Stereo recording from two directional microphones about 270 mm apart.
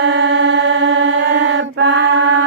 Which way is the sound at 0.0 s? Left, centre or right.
Right.